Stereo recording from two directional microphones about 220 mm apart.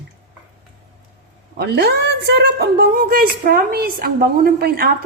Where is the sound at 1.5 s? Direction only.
45° right (ahead or behind).